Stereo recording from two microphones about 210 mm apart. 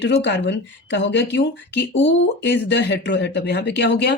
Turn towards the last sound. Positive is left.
turn(degrees=55)  # may be behind; listen again after turning